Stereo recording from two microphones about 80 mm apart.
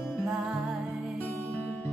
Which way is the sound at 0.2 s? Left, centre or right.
Centre.